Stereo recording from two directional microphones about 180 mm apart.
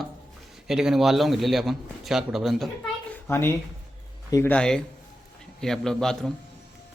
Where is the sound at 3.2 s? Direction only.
15° left (ahead or behind).